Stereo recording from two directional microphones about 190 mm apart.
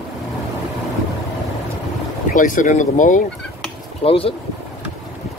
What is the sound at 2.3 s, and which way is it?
Speech, 45° left (ahead or behind).